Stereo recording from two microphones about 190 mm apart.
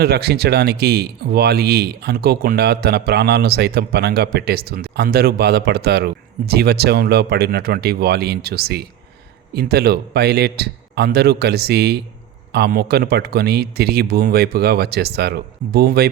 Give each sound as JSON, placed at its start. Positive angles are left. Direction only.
{"t": 0.0, "sound": "speech", "side_deg": -55}